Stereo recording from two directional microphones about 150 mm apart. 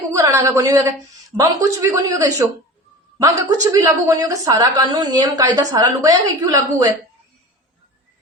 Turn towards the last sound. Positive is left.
turn(degrees=-25)  # may be behind; listen again after turning